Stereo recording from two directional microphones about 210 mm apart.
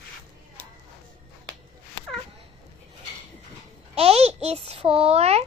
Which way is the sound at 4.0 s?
30° right (ahead or behind).